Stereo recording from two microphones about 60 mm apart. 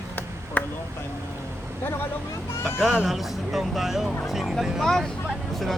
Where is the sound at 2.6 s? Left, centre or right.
Centre.